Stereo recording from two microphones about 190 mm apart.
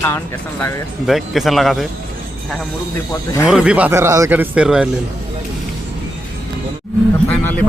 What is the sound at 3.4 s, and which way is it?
Speech, 5° right (ahead or behind).